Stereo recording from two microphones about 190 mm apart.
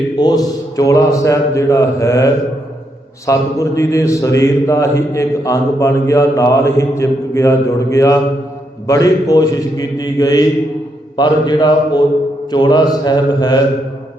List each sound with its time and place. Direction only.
0.2 s a man's voice: 20° left (ahead or behind)